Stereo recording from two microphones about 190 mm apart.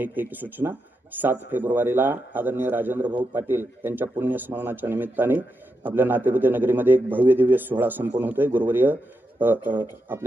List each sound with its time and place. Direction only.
0.0 s speech: 10° right (ahead or behind)
9.7 s speech: 25° right (ahead or behind)
10.1 s speech: 10° right (ahead or behind)